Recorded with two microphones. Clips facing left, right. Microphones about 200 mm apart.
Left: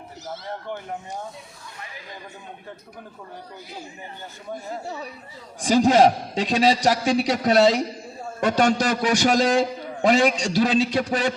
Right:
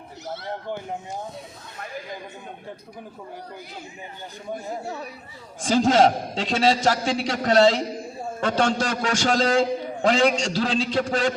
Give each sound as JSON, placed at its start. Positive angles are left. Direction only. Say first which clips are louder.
{"t": 5.5, "sound": "a man's voice", "louder": "left 2 dB", "side_deg": 15}